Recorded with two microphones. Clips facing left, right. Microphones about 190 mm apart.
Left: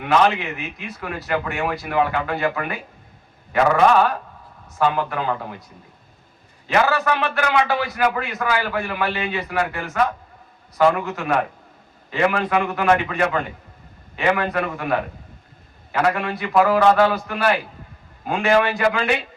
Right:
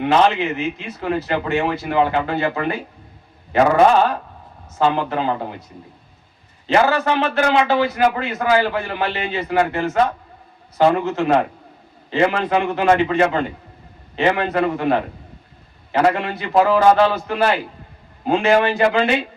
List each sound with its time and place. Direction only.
0.0 s speech: 25° right (ahead or behind)
4.8 s speech: 25° right (ahead or behind)
6.9 s speech: 30° right (ahead or behind)